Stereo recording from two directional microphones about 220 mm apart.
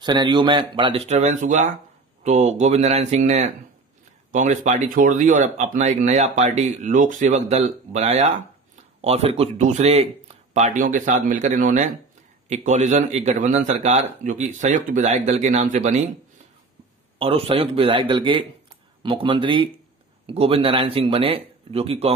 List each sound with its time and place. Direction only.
0.0 s speech: 20° right (ahead or behind)
17.2 s speech: 25° right (ahead or behind)